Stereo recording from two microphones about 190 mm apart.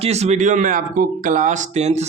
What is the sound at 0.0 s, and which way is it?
Speech, 35° right (ahead or behind).